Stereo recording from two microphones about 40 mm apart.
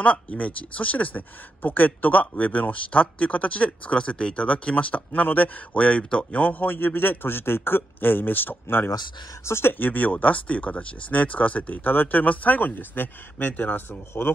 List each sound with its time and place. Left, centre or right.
0.4 s speech: left
4.5 s speech: left
6.3 s a man's voice: left
8.6 s speech: left
9.5 s speech: left
9.8 s speech: left
11.8 s speech: left
13.8 s a man's voice: left